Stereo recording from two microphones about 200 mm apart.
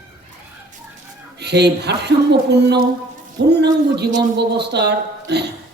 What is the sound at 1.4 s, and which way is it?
A man's voice, 55° right (ahead or behind).